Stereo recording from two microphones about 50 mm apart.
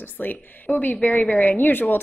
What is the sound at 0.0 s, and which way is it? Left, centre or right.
Speech, left.